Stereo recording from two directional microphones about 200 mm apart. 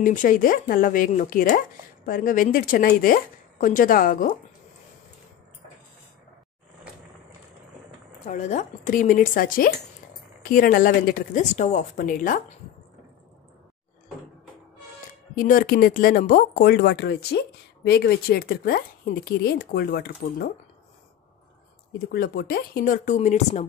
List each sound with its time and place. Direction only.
0.0 s speech: 40° left (ahead or behind)
8.3 s speech: 35° left (ahead or behind)
15.3 s speech: 45° left (ahead or behind)
22.1 s speech: 50° left (ahead or behind); by 23.7 s 35° left (ahead or behind)